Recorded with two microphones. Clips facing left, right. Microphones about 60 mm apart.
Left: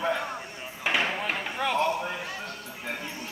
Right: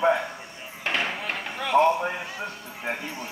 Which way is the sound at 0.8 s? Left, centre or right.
Centre.